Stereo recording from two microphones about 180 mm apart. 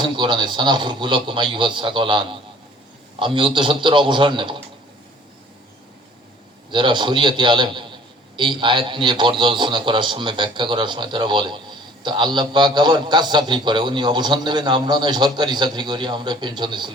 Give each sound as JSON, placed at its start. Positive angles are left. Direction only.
{"t": 0.0, "sound": "a man's voice", "side_deg": -25}
{"t": 6.7, "sound": "a man's voice", "side_deg": -25}